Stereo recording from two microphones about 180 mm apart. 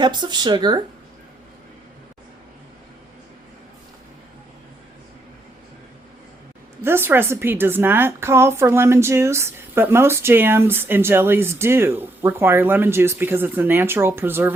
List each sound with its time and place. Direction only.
0.0 s speech: 25° right (ahead or behind)
6.8 s a woman's voice: 15° right (ahead or behind)